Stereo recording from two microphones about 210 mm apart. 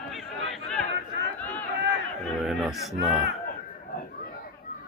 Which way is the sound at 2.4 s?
Centre (ahead or behind).